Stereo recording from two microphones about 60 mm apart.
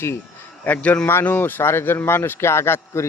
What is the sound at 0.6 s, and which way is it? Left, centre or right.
A man's voice, left.